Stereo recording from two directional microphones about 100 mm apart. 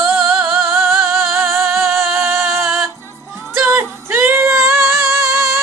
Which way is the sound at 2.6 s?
Centre (ahead or behind).